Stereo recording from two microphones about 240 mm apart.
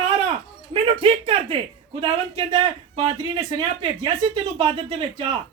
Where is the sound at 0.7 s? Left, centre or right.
Right.